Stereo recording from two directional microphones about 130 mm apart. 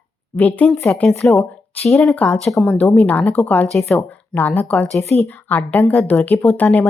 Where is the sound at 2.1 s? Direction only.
10° left (ahead or behind).